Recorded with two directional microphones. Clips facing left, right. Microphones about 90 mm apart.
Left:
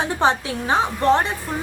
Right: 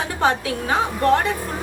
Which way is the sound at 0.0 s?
20° left (ahead or behind).